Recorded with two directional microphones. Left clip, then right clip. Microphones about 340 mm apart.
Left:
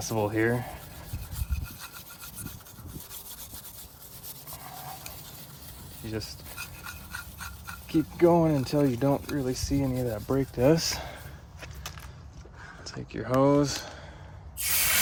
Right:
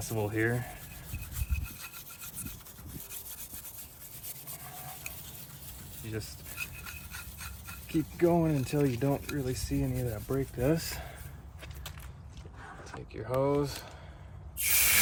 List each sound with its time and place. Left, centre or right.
0.0 s speech: centre
6.0 s speech: centre
6.6 s dog: centre
8.2 s speech: centre
12.8 s speech: left